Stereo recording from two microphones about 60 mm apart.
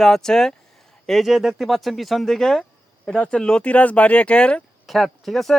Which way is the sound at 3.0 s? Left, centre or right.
Centre.